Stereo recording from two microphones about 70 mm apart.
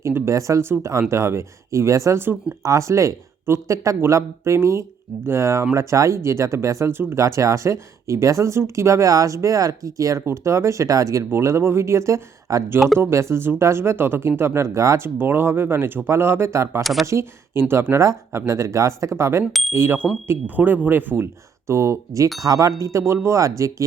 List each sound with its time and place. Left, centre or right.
0.0 s speech: right
16.8 s speech: centre
17.1 s speech: right
21.7 s speech: right
22.4 s speech: right